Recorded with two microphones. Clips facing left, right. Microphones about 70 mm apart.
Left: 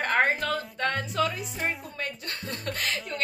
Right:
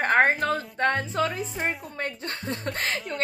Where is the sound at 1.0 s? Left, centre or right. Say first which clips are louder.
Right 1 dB; right.